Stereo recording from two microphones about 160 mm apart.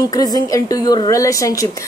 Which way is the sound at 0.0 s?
25° left (ahead or behind).